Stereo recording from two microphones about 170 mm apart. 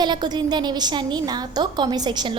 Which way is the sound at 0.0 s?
25° right (ahead or behind).